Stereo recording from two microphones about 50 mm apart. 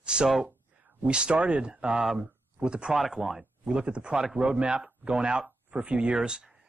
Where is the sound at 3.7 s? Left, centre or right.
Centre.